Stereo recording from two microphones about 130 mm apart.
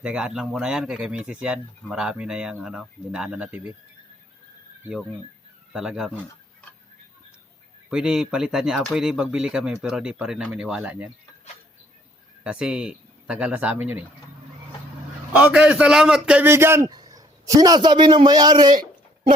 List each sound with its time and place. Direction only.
0.0 s speech: 5° right (ahead or behind)
5.7 s speech: 5° right (ahead or behind)
7.9 s speech: 5° right (ahead or behind)
12.4 s speech: 10° right (ahead or behind)
15.3 s speech: 10° right (ahead or behind)
16.8 s a man's voice: 30° right (ahead or behind)